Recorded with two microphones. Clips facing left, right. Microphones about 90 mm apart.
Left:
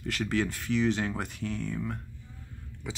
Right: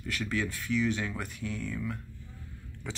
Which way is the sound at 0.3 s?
60° left (ahead or behind).